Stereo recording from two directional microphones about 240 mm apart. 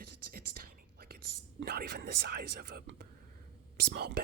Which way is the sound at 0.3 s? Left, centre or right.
Right.